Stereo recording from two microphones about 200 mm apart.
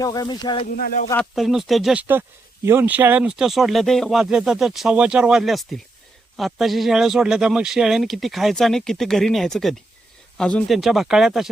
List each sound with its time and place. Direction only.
0.0 s speech: 20° left (ahead or behind)
0.7 s speech: 45° left (ahead or behind)
1.1 s speech: centre (ahead or behind)